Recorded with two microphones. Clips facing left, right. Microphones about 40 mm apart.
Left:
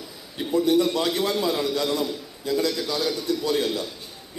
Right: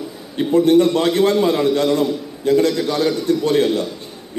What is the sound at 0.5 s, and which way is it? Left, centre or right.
A man's voice, right.